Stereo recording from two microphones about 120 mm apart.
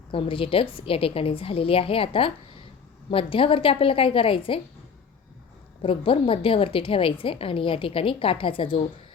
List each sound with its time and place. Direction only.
0.1 s a woman's voice: 50° left (ahead or behind)
5.8 s a woman's voice: 50° left (ahead or behind)